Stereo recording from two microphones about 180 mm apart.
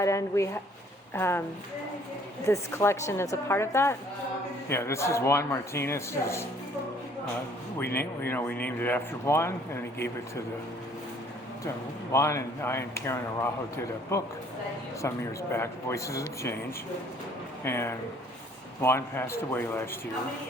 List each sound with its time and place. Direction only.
0.0 s speech: 15° left (ahead or behind)
2.5 s speech: 15° left (ahead or behind)
7.8 s speech: 10° left (ahead or behind)
12.1 s speech: 15° left (ahead or behind)
17.6 s speech: 15° left (ahead or behind)